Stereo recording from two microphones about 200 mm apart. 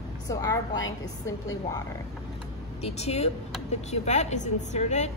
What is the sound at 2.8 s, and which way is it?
A woman's voice, 30° left (ahead or behind).